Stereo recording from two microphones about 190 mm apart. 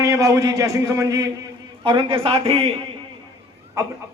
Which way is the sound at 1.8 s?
25° right (ahead or behind).